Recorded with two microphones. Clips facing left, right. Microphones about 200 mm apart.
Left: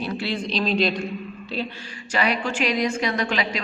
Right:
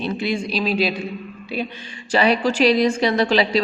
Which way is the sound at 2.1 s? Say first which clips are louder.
Right 6 dB; 30° right (ahead or behind).